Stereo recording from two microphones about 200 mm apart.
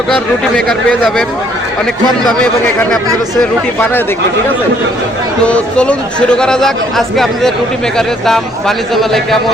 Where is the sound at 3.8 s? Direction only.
10° left (ahead or behind).